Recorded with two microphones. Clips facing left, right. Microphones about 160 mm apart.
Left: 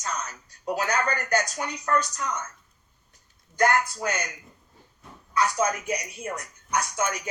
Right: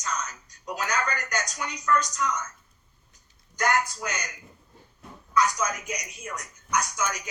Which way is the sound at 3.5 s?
55° left (ahead or behind).